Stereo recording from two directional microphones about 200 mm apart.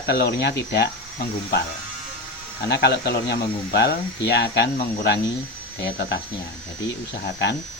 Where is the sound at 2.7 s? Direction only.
55° left (ahead or behind).